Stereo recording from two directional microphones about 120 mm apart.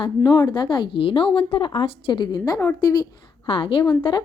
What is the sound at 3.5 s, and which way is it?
Speech, 45° left (ahead or behind).